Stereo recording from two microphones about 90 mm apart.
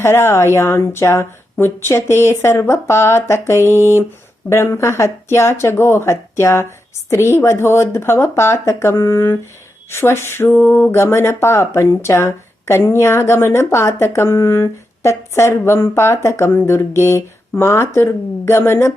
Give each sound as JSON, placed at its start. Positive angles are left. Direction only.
{"t": 0.0, "sound": "speech", "side_deg": 25}